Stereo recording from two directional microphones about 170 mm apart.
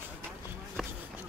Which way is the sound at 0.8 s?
Centre (ahead or behind).